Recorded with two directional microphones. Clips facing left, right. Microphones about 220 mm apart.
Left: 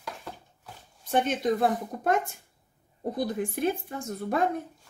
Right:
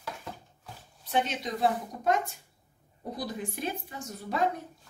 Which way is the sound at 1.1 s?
50° left (ahead or behind).